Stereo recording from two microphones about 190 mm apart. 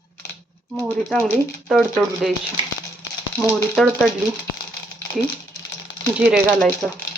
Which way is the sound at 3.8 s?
Centre (ahead or behind).